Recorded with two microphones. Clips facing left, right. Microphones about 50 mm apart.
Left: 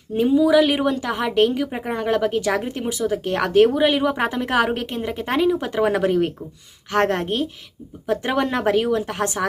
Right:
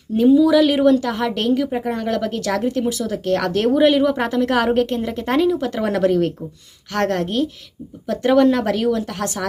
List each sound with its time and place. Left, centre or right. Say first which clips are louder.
0.2 s speech: right 3 dB; centre
3.7 s speech: right 4 dB; centre
4.0 s speech: right 3 dB; centre
5.5 s speech: left 1 dB; left